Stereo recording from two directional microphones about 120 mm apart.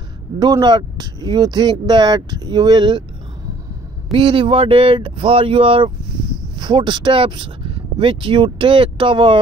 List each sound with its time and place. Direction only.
0.4 s speech: 30° right (ahead or behind)
4.1 s speech: 45° right (ahead or behind)